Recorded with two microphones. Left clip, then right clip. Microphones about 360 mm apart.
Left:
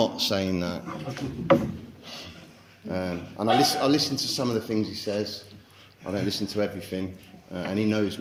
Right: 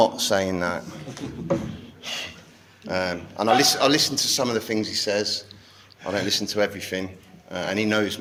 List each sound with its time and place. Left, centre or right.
0.0 s speech: centre
2.0 s a sound: right
2.9 s a man's voice: right